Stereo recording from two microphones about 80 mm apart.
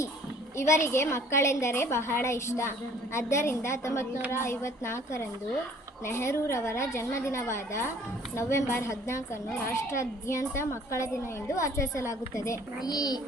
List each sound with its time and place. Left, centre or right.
0.5 s a woman's voice: left
12.8 s a child's voice: left